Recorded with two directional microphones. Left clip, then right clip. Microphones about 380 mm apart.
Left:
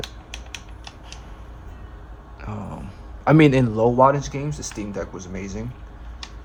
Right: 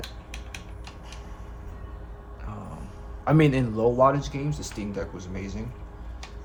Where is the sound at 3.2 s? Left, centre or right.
Left.